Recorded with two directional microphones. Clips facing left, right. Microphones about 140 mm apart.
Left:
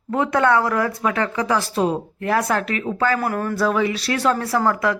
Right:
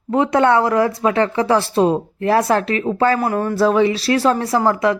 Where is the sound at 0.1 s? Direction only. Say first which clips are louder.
Right 3 dB; 20° right (ahead or behind).